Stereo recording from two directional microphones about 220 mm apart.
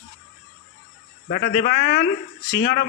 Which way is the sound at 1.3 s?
45° left (ahead or behind).